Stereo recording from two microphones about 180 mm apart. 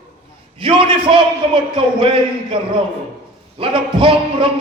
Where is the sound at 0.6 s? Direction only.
30° right (ahead or behind).